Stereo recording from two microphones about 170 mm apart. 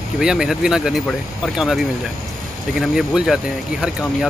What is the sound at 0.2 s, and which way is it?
Speech, 5° right (ahead or behind).